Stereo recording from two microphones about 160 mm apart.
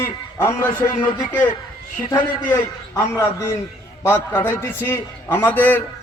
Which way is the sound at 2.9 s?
15° left (ahead or behind).